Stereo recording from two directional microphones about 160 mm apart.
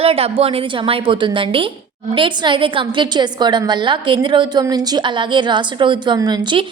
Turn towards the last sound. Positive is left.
turn(degrees=-30)  # may be behind; listen again after turning